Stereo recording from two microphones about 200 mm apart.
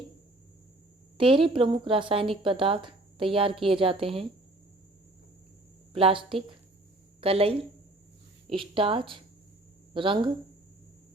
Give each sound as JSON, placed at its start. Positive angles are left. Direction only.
{"t": 1.2, "sound": "a woman's voice", "side_deg": -25}
{"t": 5.9, "sound": "a woman's voice", "side_deg": -30}